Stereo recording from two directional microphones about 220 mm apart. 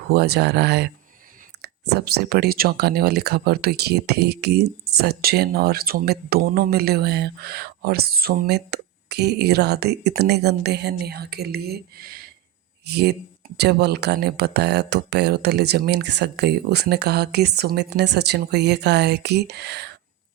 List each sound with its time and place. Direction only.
0.1 s speech: 45° right (ahead or behind)